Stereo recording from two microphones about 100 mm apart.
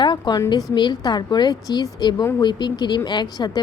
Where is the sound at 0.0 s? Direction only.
45° left (ahead or behind).